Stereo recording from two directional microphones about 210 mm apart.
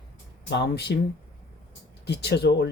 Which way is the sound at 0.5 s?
55° left (ahead or behind).